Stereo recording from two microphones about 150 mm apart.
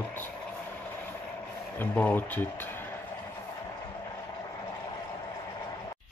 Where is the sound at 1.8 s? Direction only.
10° left (ahead or behind).